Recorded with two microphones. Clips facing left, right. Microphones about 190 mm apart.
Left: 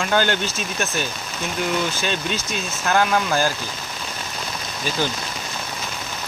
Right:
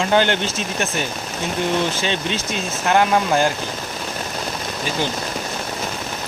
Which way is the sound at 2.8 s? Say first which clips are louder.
Right 3 dB; 25° right (ahead or behind).